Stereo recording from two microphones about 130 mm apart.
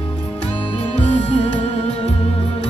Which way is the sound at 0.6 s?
40° left (ahead or behind).